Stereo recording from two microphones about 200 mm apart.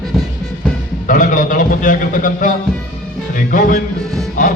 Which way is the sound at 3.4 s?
45° left (ahead or behind).